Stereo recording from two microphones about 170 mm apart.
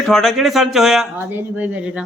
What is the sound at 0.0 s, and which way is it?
Speech, centre (ahead or behind).